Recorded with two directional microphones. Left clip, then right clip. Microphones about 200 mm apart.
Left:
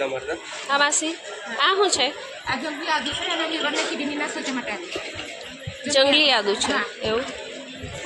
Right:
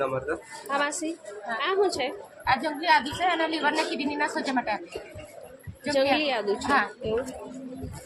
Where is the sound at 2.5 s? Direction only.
30° right (ahead or behind).